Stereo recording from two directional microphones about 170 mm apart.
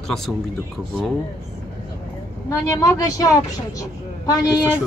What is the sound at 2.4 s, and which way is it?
A woman's voice, 20° left (ahead or behind).